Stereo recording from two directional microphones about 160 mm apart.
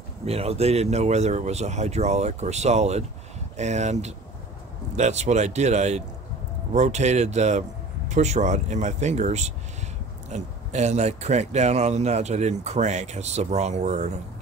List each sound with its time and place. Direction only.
0.2 s speech: 40° right (ahead or behind)